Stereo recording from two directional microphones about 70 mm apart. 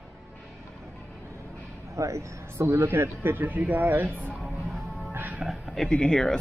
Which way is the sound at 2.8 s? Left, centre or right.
Right.